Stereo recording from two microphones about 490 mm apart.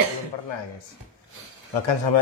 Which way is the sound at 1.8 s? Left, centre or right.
Left.